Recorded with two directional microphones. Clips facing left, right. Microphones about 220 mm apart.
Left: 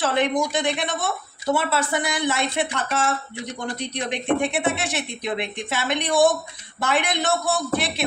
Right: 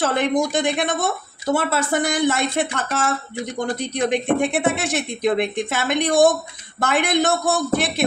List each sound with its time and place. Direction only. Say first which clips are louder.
0.0 s speech: right 2 dB; 45° right (ahead or behind)